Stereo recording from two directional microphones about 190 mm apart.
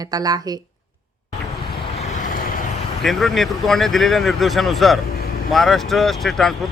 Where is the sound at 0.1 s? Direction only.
20° right (ahead or behind).